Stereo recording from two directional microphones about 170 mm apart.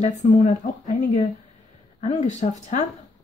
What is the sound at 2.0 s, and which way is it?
Speech, 40° left (ahead or behind).